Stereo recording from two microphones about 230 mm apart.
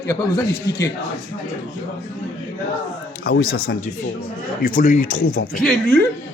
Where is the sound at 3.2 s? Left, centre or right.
Left.